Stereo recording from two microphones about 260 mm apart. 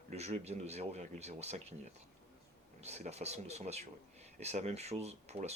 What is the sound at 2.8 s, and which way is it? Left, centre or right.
Speech, right.